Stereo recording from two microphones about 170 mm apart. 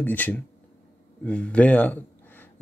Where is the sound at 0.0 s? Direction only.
10° left (ahead or behind).